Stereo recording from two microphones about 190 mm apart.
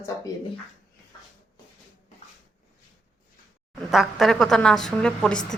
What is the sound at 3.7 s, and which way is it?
Speech, centre (ahead or behind).